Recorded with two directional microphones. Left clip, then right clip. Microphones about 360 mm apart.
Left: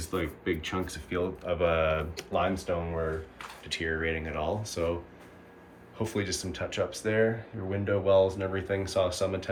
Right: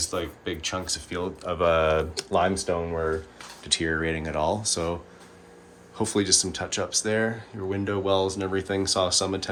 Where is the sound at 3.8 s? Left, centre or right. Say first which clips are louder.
Even; right.